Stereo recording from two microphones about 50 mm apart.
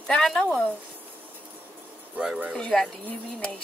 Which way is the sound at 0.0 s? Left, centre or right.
Centre.